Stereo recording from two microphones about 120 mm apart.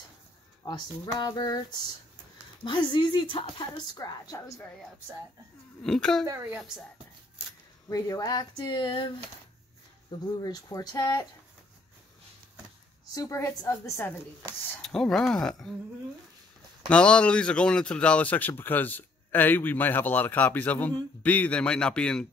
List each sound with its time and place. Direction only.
0.7 s a woman's voice: 40° left (ahead or behind)
2.6 s a woman's voice: 40° left (ahead or behind)
5.8 s speech: 5° left (ahead or behind)
7.9 s a woman's voice: 30° left (ahead or behind)
13.1 s a woman's voice: 30° left (ahead or behind)
14.8 s speech: 5° left (ahead or behind)
16.9 s a man's voice: 10° left (ahead or behind)